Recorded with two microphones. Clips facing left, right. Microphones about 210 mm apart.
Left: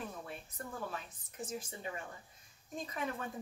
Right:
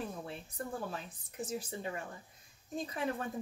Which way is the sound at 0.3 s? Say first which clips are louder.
Right 4 dB; 30° right (ahead or behind).